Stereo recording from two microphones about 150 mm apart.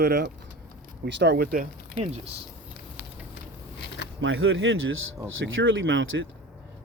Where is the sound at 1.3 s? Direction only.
80° right.